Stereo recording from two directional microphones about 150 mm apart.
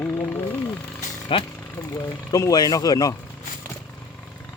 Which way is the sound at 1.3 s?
35° left (ahead or behind).